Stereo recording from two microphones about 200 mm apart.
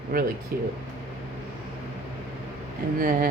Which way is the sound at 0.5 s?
45° right (ahead or behind).